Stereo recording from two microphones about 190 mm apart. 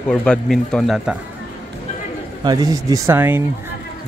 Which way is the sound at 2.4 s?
20° right (ahead or behind).